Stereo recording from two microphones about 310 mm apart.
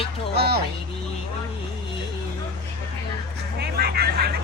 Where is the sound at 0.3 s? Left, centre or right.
Right.